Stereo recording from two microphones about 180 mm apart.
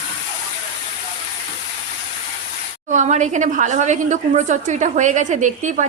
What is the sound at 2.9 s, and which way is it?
A woman's voice, 40° right (ahead or behind).